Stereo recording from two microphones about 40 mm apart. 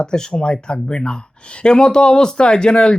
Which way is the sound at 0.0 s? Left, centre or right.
Centre.